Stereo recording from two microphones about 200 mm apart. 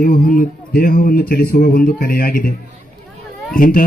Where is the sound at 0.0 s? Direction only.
45° left (ahead or behind).